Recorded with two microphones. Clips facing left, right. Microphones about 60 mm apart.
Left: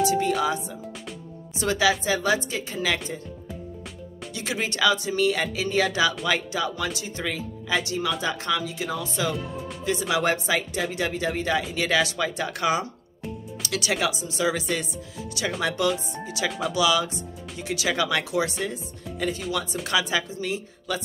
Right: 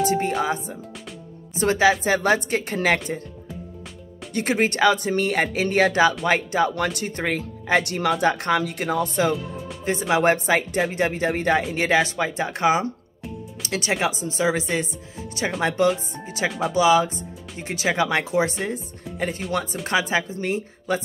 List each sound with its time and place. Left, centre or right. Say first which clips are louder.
0.0 s music: right 1 dB; right
0.4 s speech: right 1 dB; right
4.3 s speech: right 8 dB; right
6.7 s speech: right 5 dB; right
13.6 s music: right 2 dB; right
14.0 s speech: right 3 dB; right
16.4 s speech: right 3 dB; centre
16.7 s speech: right 6 dB; right